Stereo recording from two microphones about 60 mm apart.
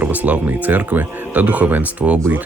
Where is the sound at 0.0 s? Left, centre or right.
Right.